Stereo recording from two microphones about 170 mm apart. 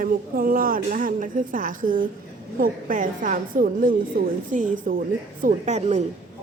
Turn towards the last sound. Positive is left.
turn(degrees=-40)  # may be behind; listen again after turning